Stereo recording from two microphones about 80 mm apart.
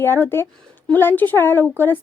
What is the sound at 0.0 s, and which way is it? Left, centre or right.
A woman's voice, left.